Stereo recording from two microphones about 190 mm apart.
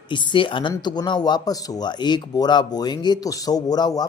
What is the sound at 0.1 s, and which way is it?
Speech, 25° left (ahead or behind).